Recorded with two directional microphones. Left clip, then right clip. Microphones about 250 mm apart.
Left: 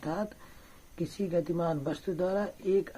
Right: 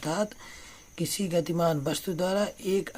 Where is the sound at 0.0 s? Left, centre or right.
Right.